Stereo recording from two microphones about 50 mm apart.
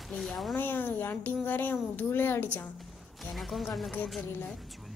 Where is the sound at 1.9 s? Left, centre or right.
Left.